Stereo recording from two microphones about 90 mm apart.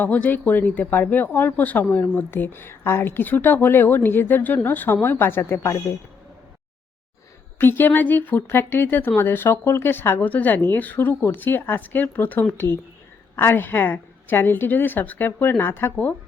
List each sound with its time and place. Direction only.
0.0 s speech: 20° left (ahead or behind)
7.6 s speech: 25° left (ahead or behind)